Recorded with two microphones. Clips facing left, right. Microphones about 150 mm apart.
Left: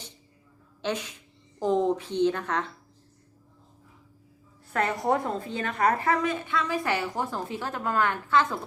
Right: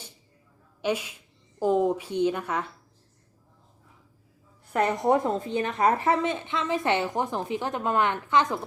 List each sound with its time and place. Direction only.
0.8 s a woman's voice: 10° right (ahead or behind)
4.7 s a woman's voice: 20° right (ahead or behind)